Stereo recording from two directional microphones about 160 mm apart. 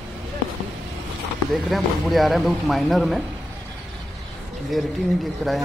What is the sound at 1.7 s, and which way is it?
Speech, centre (ahead or behind).